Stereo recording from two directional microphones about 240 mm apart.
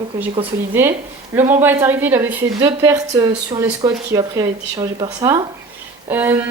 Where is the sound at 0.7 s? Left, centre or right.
Centre.